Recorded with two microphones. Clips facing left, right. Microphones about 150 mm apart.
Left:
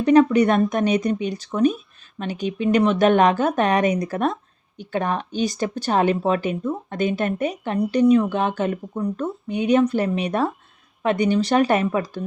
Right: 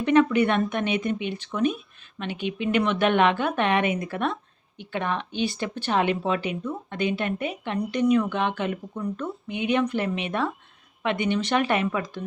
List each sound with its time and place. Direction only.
0.0 s speech: 35° left (ahead or behind)